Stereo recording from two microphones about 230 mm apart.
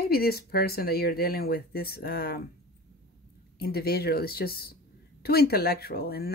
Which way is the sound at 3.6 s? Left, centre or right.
Left.